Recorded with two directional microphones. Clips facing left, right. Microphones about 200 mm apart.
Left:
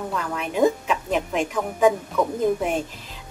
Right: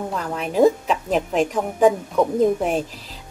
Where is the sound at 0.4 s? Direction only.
35° right (ahead or behind).